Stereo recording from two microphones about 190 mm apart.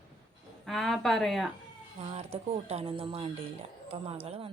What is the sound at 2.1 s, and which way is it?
Speech, 35° right (ahead or behind).